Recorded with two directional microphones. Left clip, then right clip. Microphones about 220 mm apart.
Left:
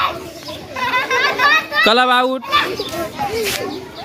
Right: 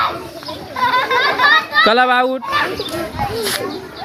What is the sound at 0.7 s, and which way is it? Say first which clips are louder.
Children playing: right 2 dB; 40° left (ahead or behind).